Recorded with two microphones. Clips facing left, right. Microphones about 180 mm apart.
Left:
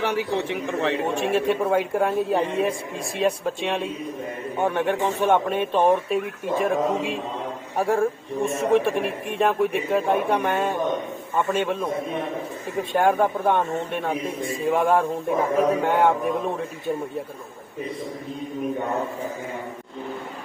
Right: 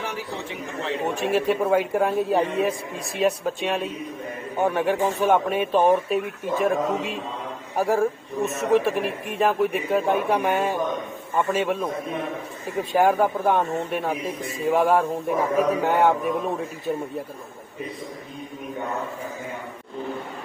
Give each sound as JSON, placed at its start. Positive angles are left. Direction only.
{"t": 0.0, "sound": "a man's voice", "side_deg": 65}
{"t": 1.0, "sound": "speech", "side_deg": 0}